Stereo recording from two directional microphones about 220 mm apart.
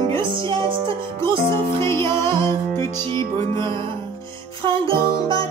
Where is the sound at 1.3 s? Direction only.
10° left (ahead or behind).